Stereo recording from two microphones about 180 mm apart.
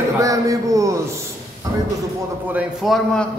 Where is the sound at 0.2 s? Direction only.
20° right (ahead or behind).